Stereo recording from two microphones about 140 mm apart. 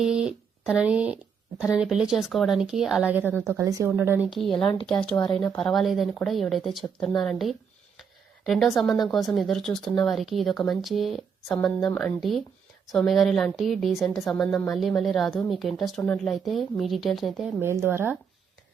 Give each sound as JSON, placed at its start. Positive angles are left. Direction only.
{"t": 0.0, "sound": "speech", "side_deg": -5}
{"t": 4.3, "sound": "speech", "side_deg": 0}
{"t": 4.6, "sound": "speech", "side_deg": 35}
{"t": 4.9, "sound": "a woman's voice", "side_deg": 5}
{"t": 17.6, "sound": "speech", "side_deg": -15}